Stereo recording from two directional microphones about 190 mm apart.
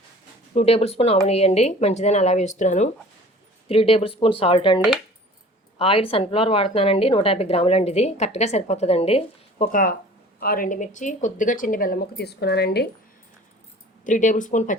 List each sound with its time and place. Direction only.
0.5 s a woman's voice: 30° left (ahead or behind)
5.8 s a woman's voice: 30° left (ahead or behind)
10.4 s speech: 50° left (ahead or behind)
14.0 s a woman's voice: 40° left (ahead or behind)